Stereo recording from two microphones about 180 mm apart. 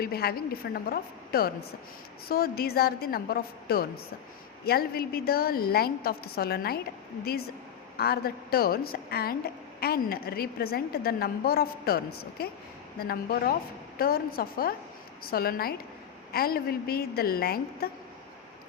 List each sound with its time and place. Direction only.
0.0 s a woman's voice: 60° left (ahead or behind)
7.9 s a woman's voice: 60° left (ahead or behind)